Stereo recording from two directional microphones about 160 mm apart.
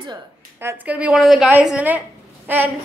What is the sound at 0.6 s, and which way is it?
A woman's voice, 10° right (ahead or behind).